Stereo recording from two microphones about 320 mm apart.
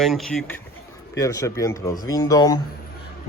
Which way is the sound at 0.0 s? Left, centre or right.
Centre.